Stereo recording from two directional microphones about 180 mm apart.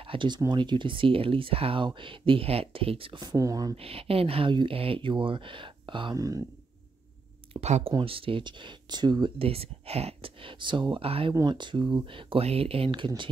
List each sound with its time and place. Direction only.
0.0 s speech: 30° right (ahead or behind)
3.7 s speech: 30° right (ahead or behind)
7.6 s speech: 35° right (ahead or behind)